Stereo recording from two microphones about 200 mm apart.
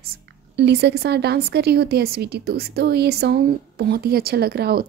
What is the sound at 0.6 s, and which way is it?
A woman's voice, 55° right (ahead or behind).